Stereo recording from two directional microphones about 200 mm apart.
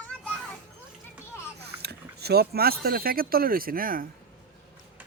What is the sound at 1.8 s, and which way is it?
Speech, 55° right (ahead or behind).